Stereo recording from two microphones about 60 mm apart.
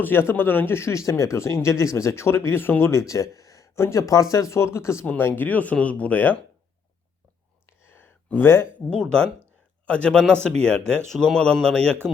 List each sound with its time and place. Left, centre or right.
0.0 s a man's voice: left
0.8 s speech: left
3.1 s a sound: left
3.8 s speech: left
5.0 s a man's voice: left
7.7 s a sound: left
8.9 s a man's voice: centre